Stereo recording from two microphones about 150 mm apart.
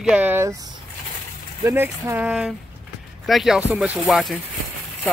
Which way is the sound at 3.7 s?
10° right (ahead or behind).